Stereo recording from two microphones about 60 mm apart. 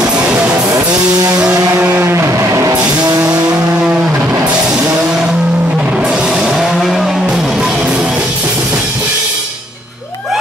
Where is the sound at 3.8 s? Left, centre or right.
Centre.